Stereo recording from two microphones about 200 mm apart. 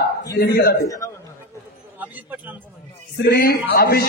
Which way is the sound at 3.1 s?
55° left (ahead or behind).